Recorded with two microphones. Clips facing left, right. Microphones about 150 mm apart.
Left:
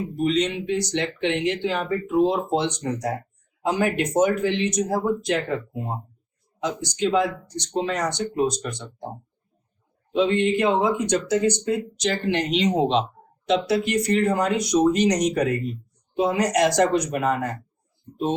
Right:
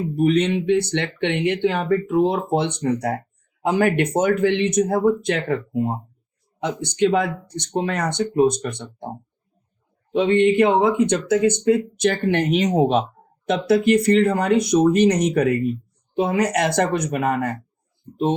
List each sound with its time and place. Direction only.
0.2 s speech: 55° right (ahead or behind)
6.6 s speech: 60° right (ahead or behind)
10.2 s speech: 60° right (ahead or behind)